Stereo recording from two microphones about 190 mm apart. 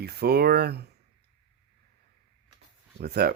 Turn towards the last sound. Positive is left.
turn(degrees=-55)  # may be behind; listen again after turning